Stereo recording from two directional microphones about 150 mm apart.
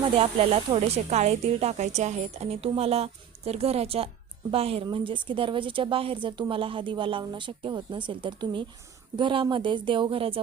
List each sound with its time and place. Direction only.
0.2 s a woman's voice: 40° right (ahead or behind)